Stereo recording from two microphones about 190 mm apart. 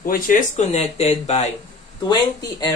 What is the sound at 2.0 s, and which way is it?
Speech, 20° left (ahead or behind).